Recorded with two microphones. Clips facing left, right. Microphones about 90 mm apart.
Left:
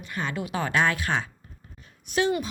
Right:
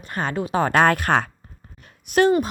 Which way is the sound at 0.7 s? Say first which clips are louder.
Right 7 dB; 55° right (ahead or behind).